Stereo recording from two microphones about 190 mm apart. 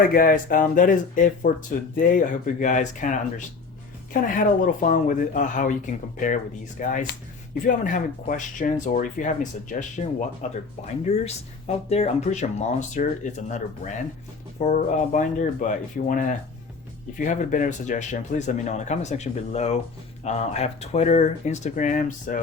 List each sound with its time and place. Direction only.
0.0 s speech: 50° left (ahead or behind)
14.6 s speech: 40° left (ahead or behind)